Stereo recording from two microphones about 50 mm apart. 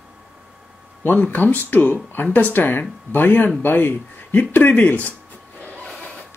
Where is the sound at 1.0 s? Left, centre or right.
Left.